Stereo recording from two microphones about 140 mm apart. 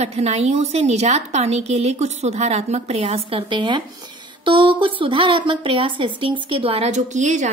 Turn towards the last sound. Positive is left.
turn(degrees=-60)  # may be behind; listen again after turning